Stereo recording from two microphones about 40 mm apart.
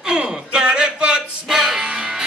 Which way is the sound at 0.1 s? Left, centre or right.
Right.